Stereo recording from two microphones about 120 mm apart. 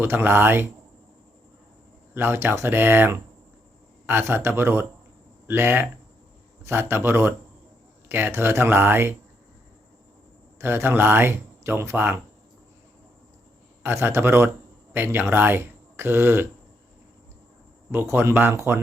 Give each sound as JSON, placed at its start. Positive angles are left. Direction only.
{"t": 0.0, "sound": "speech", "side_deg": -20}
{"t": 2.1, "sound": "speech", "side_deg": -20}
{"t": 10.6, "sound": "speech", "side_deg": -20}
{"t": 13.8, "sound": "speech", "side_deg": -20}
{"t": 17.9, "sound": "speech", "side_deg": -20}